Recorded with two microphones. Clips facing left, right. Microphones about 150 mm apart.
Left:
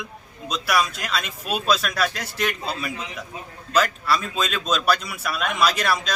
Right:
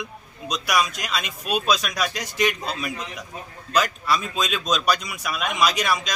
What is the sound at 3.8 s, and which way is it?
Speech, centre (ahead or behind).